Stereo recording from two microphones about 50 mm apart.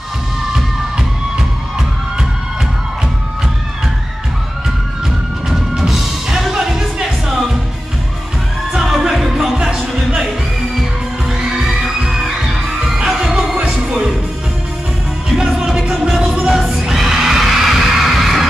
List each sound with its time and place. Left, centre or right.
0.5 s music: centre
5.5 s music: centre
8.7 s music: centre
10.8 s music: centre
15.3 s music: centre